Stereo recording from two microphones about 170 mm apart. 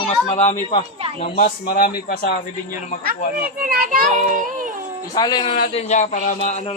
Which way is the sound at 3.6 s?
55° right (ahead or behind).